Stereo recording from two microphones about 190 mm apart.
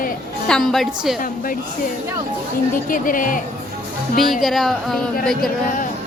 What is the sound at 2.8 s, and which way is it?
Speech, 45° left (ahead or behind).